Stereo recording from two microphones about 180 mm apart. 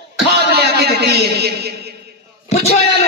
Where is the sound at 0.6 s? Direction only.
65° right (ahead or behind).